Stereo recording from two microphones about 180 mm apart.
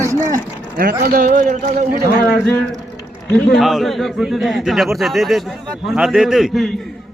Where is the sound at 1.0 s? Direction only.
60° right (ahead or behind).